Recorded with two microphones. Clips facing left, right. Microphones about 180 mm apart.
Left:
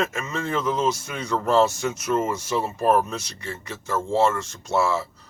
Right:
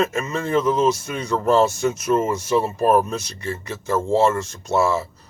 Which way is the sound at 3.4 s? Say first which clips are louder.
Right 7 dB; 40° right (ahead or behind).